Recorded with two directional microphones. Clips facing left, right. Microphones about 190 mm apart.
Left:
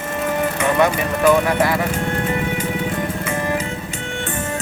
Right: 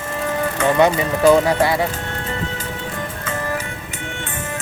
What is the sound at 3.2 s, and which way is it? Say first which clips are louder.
Music: even; 10° left (ahead or behind).